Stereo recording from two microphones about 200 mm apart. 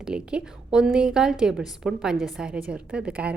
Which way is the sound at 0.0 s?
5° right (ahead or behind).